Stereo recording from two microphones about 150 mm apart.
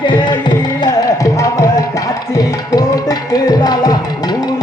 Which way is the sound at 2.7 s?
25° left (ahead or behind).